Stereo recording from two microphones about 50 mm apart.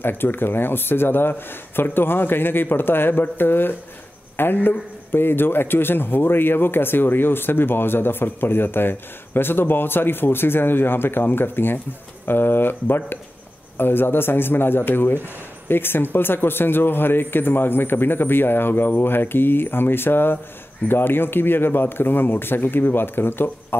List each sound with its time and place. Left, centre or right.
0.0 s a man's voice: left